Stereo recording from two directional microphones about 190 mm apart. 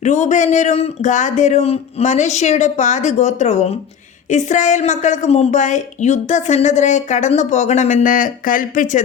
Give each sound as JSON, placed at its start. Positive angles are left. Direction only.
{"t": 0.0, "sound": "a woman's voice", "side_deg": 40}